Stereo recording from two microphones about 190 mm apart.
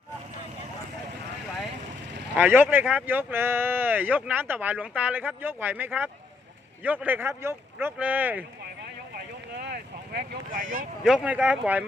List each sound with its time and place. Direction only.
2.3 s speech: 10° right (ahead or behind)
9.1 s a sound: 60° right (ahead or behind)
11.0 s speech: 5° right (ahead or behind)